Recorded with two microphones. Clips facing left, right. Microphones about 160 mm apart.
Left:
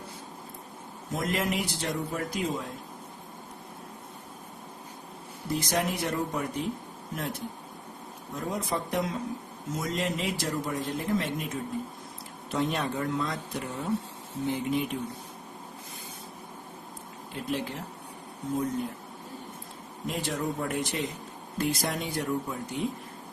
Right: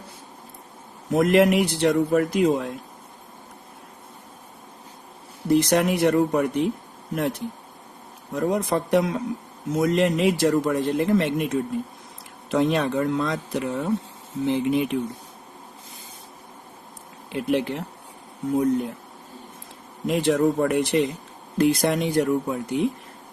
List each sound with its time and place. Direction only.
1.1 s speech: 70° right (ahead or behind)
5.5 s speech: 70° right (ahead or behind)
8.3 s speech: 70° right (ahead or behind)
12.5 s speech: 90° right
17.3 s speech: 70° right (ahead or behind)
20.1 s speech: 80° right
21.6 s speech: 75° right (ahead or behind)